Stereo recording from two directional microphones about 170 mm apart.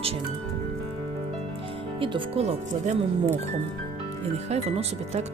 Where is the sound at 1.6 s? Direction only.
30° right (ahead or behind).